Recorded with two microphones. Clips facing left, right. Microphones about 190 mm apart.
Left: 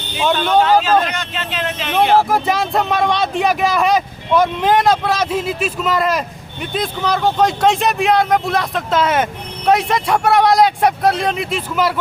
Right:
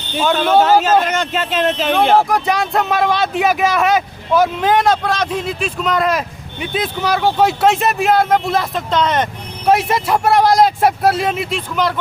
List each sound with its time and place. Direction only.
0.2 s a man's voice: centre (ahead or behind)
0.6 s speech: 45° right (ahead or behind)
2.3 s a man's voice: centre (ahead or behind)